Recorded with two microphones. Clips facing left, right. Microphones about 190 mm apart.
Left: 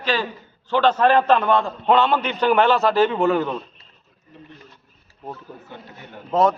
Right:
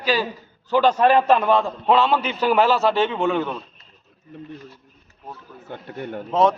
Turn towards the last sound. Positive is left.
turn(degrees=0)  # may be behind; listen again after turning